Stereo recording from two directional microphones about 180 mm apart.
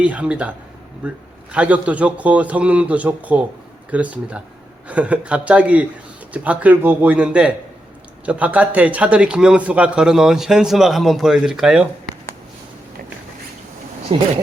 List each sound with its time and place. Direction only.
0.0 s a man's voice: 5° right (ahead or behind)
14.1 s speech: 30° right (ahead or behind)